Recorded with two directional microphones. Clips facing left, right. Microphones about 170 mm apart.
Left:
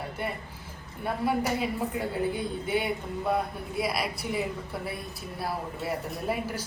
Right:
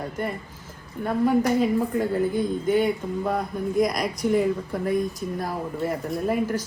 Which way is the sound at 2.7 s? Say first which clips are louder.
Right 4 dB; 10° left (ahead or behind).